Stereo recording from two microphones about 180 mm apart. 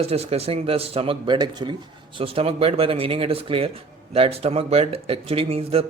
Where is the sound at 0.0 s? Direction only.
35° right (ahead or behind).